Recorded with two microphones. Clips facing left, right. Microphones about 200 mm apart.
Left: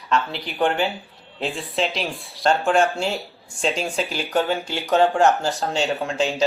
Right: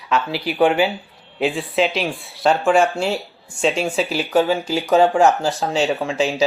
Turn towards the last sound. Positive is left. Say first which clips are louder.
# right 3 dB
turn(degrees=-5)  # may be behind; listen again after turning